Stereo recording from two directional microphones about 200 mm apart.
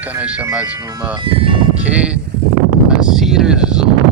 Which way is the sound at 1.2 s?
25° right (ahead or behind).